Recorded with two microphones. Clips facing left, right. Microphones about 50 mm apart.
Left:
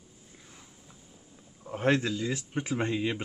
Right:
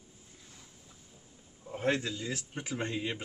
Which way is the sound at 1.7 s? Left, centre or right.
Left.